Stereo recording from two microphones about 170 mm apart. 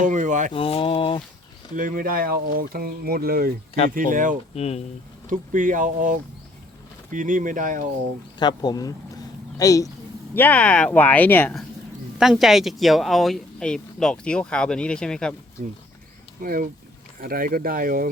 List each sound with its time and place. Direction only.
0.0 s speech: 50° right (ahead or behind)
0.5 s speech: 35° left (ahead or behind)
1.7 s speech: 55° right (ahead or behind)
4.5 s speech: 35° left (ahead or behind)
5.3 s speech: 50° right (ahead or behind)
8.4 s speech: 25° left (ahead or behind); by 11.6 s 10° left (ahead or behind)
12.2 s speech: centre (ahead or behind)
16.4 s speech: 55° right (ahead or behind)